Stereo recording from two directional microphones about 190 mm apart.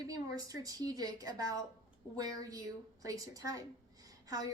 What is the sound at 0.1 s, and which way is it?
A woman's voice, 20° right (ahead or behind).